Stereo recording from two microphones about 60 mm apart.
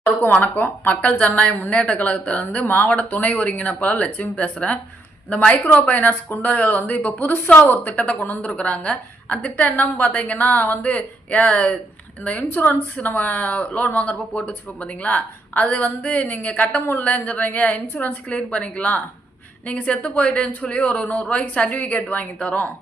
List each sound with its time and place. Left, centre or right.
0.3 s a woman's voice: left
5.9 s a woman's voice: left
18.3 s a woman's voice: centre